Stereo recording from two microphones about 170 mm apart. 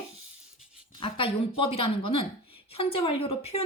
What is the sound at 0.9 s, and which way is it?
Speech, 30° left (ahead or behind).